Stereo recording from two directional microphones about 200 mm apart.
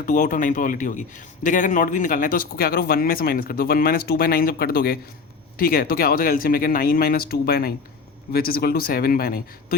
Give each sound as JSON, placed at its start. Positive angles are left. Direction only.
{"t": 0.0, "sound": "a man's voice", "side_deg": 40}